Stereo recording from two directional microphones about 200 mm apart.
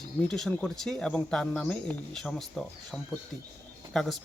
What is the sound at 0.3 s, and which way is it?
Speech, centre (ahead or behind).